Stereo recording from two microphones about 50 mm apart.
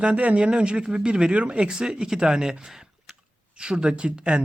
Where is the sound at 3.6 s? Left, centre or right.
Centre.